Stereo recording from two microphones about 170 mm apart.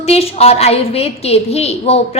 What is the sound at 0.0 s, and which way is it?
A woman's voice, 35° left (ahead or behind).